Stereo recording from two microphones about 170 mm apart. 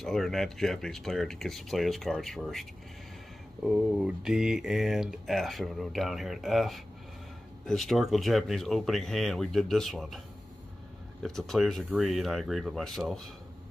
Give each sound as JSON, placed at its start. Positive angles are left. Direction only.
{"t": 0.0, "sound": "speech", "side_deg": 0}
{"t": 3.6, "sound": "speech", "side_deg": -5}
{"t": 11.2, "sound": "speech", "side_deg": 0}